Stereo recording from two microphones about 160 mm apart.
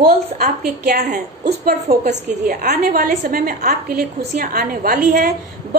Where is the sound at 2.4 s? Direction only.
65° right (ahead or behind).